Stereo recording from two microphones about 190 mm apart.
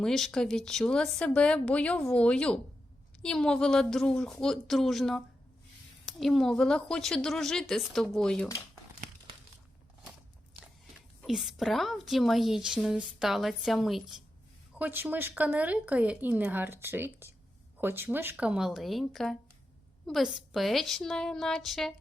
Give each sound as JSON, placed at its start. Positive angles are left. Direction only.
{"t": 0.0, "sound": "a woman's voice", "side_deg": 0}
{"t": 8.4, "sound": "speech", "side_deg": 15}
{"t": 11.3, "sound": "a woman's voice", "side_deg": 0}